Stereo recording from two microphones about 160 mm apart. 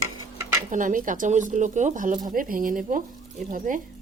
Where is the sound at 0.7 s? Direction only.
55° right (ahead or behind).